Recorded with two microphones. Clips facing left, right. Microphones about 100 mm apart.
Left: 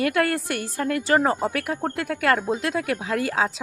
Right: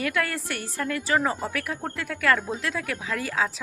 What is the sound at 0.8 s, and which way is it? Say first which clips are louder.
Speech: left 4 dB; 45° left (ahead or behind).